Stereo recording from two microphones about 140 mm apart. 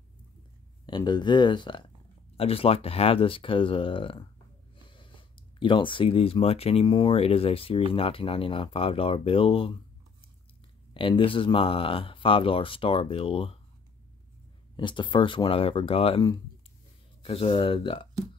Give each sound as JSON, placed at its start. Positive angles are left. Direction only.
{"t": 0.8, "sound": "speech", "side_deg": 35}
{"t": 10.9, "sound": "speech", "side_deg": 40}
{"t": 14.8, "sound": "speech", "side_deg": 35}
{"t": 17.2, "sound": "speech", "side_deg": 40}